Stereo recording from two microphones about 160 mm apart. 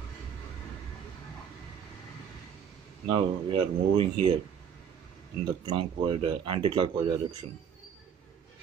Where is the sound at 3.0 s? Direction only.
30° right (ahead or behind).